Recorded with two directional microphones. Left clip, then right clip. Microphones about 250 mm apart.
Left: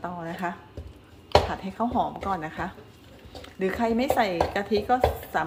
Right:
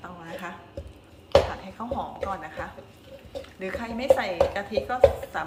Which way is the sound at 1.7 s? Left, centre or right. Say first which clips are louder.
Left 6 dB; left.